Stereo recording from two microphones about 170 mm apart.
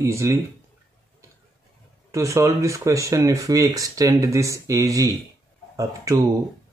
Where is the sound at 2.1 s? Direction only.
15° right (ahead or behind).